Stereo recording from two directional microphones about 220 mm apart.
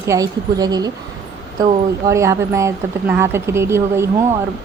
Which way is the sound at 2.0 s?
15° right (ahead or behind).